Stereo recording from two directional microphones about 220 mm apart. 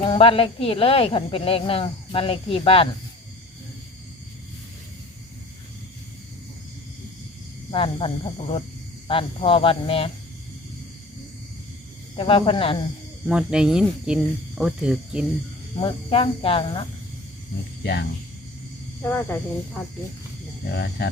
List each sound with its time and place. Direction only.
0.0 s speech: 25° left (ahead or behind)
7.7 s speech: 25° left (ahead or behind)
12.1 s speech: 25° left (ahead or behind)
13.2 s speech: 5° right (ahead or behind)
15.8 s speech: 25° left (ahead or behind)
19.0 s speech: 10° left (ahead or behind)
20.7 s speech: 50° left (ahead or behind)